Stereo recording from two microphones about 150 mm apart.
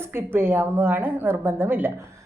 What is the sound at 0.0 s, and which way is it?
A woman's voice, 15° right (ahead or behind).